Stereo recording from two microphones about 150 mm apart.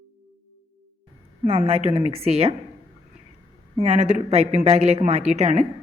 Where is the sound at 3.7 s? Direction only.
45° right (ahead or behind).